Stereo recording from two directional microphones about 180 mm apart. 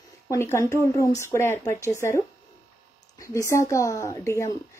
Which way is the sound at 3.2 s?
15° left (ahead or behind).